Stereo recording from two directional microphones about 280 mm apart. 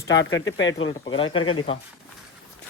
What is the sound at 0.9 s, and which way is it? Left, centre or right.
Speech, centre.